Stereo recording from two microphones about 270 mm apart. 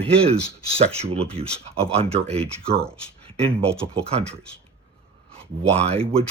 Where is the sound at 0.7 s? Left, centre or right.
Right.